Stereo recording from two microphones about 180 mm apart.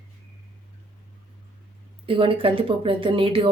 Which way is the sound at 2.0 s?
30° right (ahead or behind).